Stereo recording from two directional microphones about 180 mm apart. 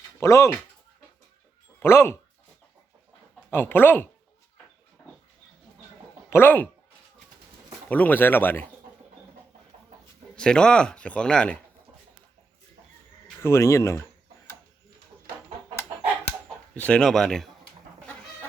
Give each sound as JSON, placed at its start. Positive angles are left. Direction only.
{"t": 0.2, "sound": "speech", "side_deg": 15}
{"t": 1.8, "sound": "speech", "side_deg": 15}
{"t": 3.5, "sound": "speech", "side_deg": 10}
{"t": 6.3, "sound": "speech", "side_deg": 10}
{"t": 7.9, "sound": "speech", "side_deg": 10}
{"t": 10.3, "sound": "speech", "side_deg": 5}
{"t": 13.4, "sound": "speech", "side_deg": 15}
{"t": 16.7, "sound": "speech", "side_deg": 5}